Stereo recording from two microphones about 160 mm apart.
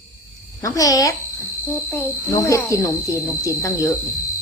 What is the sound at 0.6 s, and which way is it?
Speech, 20° left (ahead or behind).